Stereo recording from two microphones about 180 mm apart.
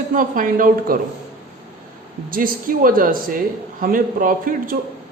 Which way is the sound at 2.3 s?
50° right (ahead or behind).